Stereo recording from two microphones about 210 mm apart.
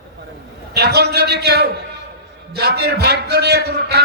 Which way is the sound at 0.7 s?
50° right (ahead or behind).